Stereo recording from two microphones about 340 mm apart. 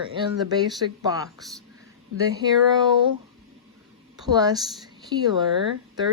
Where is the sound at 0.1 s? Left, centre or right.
Centre.